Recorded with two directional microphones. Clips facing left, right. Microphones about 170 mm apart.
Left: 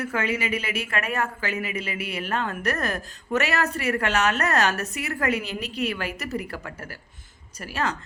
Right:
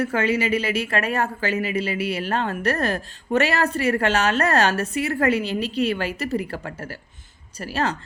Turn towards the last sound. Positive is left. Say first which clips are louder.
# right 3 dB
turn(degrees=-30)  # may be behind; listen again after turning